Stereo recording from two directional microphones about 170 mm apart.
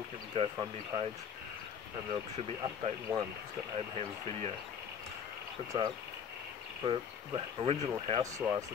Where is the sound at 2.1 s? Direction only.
30° right (ahead or behind).